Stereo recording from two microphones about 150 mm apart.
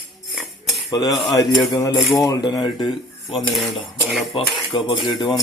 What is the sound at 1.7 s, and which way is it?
Speech, 20° left (ahead or behind).